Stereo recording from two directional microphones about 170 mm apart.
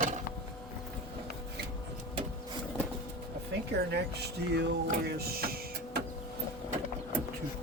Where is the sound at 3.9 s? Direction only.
75° right (ahead or behind); by 6.0 s 60° right (ahead or behind).